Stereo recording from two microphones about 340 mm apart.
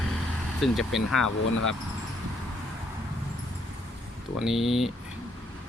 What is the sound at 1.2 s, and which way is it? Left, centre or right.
Speech, left.